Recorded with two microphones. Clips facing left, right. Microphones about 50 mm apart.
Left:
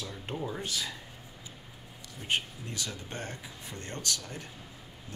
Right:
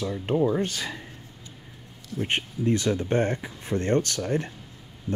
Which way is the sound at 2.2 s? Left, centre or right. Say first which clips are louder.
Right 7 dB; right.